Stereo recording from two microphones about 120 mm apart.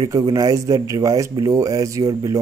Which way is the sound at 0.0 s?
35° right (ahead or behind).